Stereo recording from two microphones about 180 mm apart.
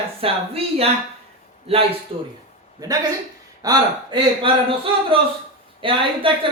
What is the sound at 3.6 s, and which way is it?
Speech, 25° right (ahead or behind).